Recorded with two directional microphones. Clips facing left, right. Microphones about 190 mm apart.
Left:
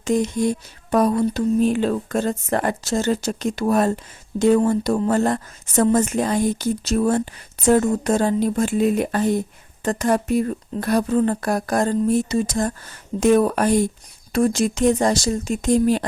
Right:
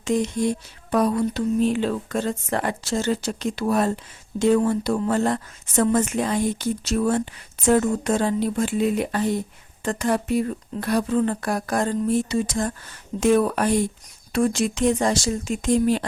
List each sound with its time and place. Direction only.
0.0 s speech: 45° left (ahead or behind)